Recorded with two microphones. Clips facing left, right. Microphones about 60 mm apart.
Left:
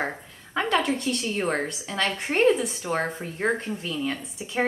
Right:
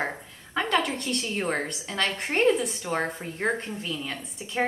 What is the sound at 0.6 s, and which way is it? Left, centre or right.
A woman's voice, centre.